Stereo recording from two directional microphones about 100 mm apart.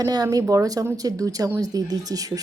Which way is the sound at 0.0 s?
40° right (ahead or behind).